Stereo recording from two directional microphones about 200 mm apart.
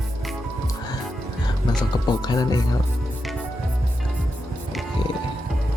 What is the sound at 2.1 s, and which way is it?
Music, 20° left (ahead or behind).